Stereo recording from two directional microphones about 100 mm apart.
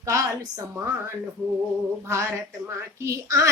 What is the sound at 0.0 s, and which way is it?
Speech, 30° right (ahead or behind).